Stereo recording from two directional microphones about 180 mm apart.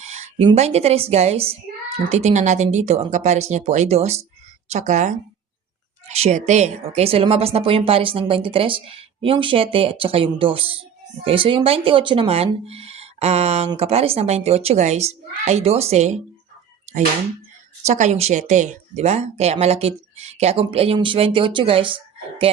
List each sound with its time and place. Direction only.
0.0 s a sound: 40° right (ahead or behind)
0.4 s speech: 35° right (ahead or behind)
17.8 s speech: 40° right (ahead or behind)